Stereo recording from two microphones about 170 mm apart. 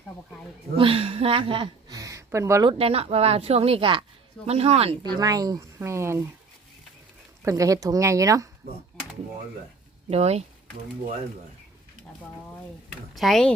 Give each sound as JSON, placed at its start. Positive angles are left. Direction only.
{"t": 0.8, "sound": "a woman's voice", "side_deg": -35}
{"t": 2.6, "sound": "speech", "side_deg": -35}
{"t": 5.2, "sound": "speech", "side_deg": -20}
{"t": 7.4, "sound": "speech", "side_deg": -20}
{"t": 10.1, "sound": "speech", "side_deg": -40}
{"t": 13.1, "sound": "speech", "side_deg": 0}